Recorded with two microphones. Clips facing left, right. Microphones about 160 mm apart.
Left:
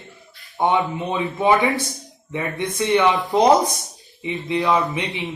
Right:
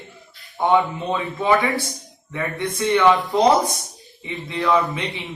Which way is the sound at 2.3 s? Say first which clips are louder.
Even; 20° left (ahead or behind).